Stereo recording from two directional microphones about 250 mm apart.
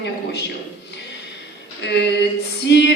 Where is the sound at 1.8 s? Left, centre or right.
Left.